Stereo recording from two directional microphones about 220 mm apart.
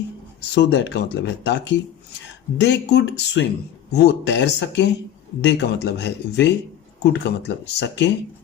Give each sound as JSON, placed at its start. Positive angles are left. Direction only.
{"t": 0.5, "sound": "speech", "side_deg": 50}